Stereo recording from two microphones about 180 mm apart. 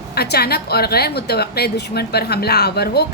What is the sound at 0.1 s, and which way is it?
A woman's voice, 60° left (ahead or behind).